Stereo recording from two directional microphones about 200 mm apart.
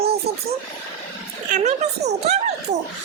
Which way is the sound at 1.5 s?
35° right (ahead or behind).